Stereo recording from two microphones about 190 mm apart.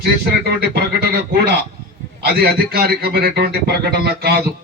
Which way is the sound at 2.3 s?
55° right (ahead or behind).